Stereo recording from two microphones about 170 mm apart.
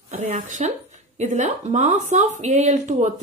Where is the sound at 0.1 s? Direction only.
45° right (ahead or behind).